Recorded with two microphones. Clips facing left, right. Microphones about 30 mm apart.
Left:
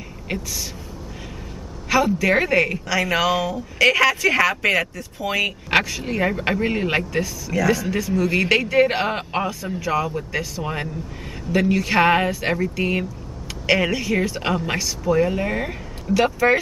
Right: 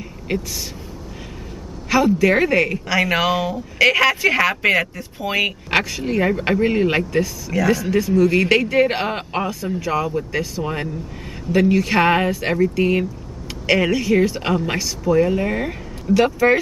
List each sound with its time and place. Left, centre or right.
0.3 s a woman's voice: centre
1.9 s speech: centre
2.9 s a woman's voice: centre
5.7 s speech: centre